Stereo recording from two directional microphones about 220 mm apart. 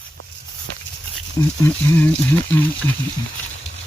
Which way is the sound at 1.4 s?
10° left (ahead or behind).